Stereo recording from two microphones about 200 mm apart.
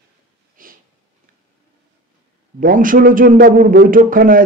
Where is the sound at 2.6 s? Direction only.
45° right (ahead or behind).